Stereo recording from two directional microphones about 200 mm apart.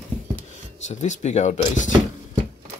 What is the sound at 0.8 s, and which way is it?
Speech, 35° left (ahead or behind).